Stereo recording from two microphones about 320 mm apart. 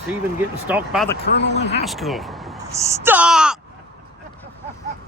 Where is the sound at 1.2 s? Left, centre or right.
Left.